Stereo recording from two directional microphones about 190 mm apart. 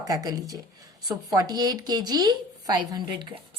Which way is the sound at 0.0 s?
20° right (ahead or behind).